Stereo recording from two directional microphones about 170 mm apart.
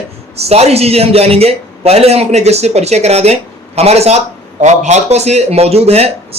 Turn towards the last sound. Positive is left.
turn(degrees=-35)  # may be behind; listen again after turning